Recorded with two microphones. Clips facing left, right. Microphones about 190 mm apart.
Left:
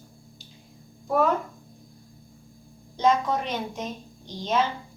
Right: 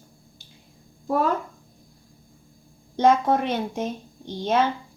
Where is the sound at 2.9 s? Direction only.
55° right (ahead or behind).